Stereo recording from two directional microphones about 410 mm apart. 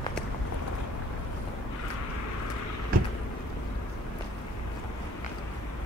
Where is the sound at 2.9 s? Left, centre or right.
Right.